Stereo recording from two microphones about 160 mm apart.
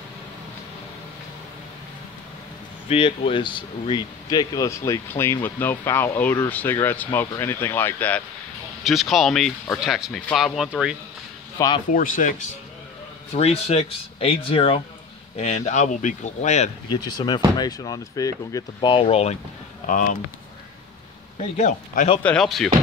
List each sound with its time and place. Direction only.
2.9 s speech: 35° left (ahead or behind); by 8.2 s 10° left (ahead or behind)
8.8 s speech: centre (ahead or behind)
11.5 s speech: 20° left (ahead or behind)
11.9 s speech: 60° left (ahead or behind)
13.3 s speech: 40° left (ahead or behind)
16.9 s speech: 25° left (ahead or behind)
21.5 s speech: 45° left (ahead or behind)
22.2 s speech: 5° left (ahead or behind)